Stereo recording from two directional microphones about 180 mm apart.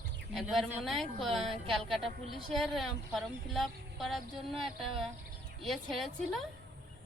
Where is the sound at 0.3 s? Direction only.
Centre (ahead or behind).